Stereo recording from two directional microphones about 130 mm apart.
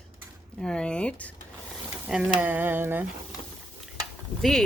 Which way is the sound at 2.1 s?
10° right (ahead or behind).